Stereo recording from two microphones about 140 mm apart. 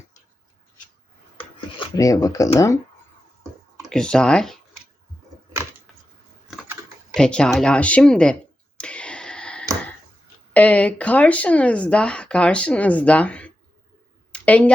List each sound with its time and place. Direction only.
2.0 s speech: 25° left (ahead or behind)
3.8 s speech: 5° left (ahead or behind)
7.1 s speech: 5° left (ahead or behind)
8.8 s a sound: 10° left (ahead or behind)
10.5 s speech: 10° left (ahead or behind)
14.3 s a sound: 10° left (ahead or behind)